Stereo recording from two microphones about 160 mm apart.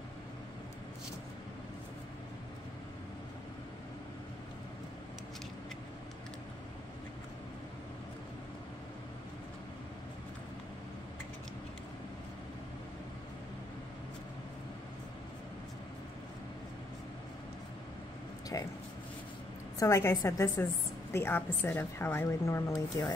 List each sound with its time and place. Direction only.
18.5 s speech: 20° left (ahead or behind)
19.8 s speech: 20° left (ahead or behind)